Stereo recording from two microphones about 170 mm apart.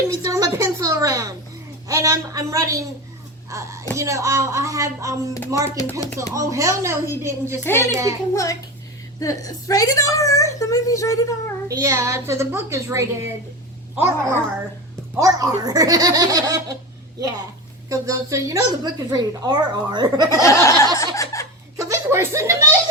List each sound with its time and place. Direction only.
0.1 s a woman's voice: 20° right (ahead or behind)
5.7 s a sound: 15° left (ahead or behind)
6.3 s a woman's voice: 20° right (ahead or behind)
8.3 s a sound: 20° left (ahead or behind)
9.2 s a woman's voice: 20° left (ahead or behind)
11.7 s a woman's voice: 20° right (ahead or behind)
17.8 s a woman's voice: 20° right (ahead or behind)
20.3 s a sound: 20° left (ahead or behind)
21.0 s snicker: 20° left (ahead or behind)
21.8 s chuckle: 15° right (ahead or behind)